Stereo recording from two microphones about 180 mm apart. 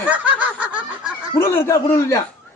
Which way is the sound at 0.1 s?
10° right (ahead or behind).